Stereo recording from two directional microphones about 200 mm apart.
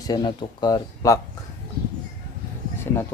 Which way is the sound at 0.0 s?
20° left (ahead or behind).